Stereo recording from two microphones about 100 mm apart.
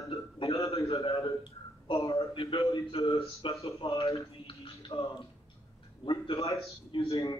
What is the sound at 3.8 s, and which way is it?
Speech, 60° left (ahead or behind).